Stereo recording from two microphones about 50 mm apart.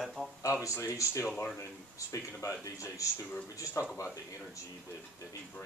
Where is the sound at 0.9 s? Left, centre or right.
Left.